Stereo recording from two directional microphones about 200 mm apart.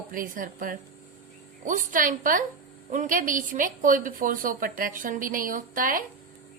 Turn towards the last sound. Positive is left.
turn(degrees=-45)  # may be behind; listen again after turning